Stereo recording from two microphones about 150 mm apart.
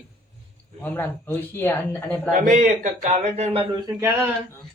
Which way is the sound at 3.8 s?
20° right (ahead or behind).